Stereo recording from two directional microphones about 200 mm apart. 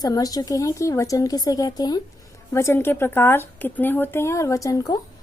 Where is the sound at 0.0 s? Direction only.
20° left (ahead or behind).